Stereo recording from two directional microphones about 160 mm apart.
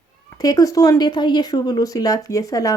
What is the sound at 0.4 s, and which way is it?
Speech, 20° left (ahead or behind).